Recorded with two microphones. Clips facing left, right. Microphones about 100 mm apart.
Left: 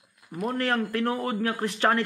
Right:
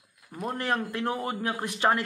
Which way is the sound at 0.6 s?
20° right (ahead or behind).